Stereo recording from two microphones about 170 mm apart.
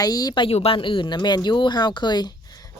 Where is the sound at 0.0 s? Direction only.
20° left (ahead or behind).